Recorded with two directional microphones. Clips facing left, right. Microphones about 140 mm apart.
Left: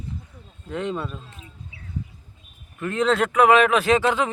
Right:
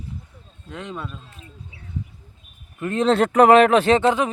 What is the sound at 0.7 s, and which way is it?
Speech, centre (ahead or behind).